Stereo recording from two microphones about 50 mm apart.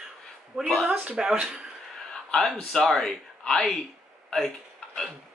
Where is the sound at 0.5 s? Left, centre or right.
Centre.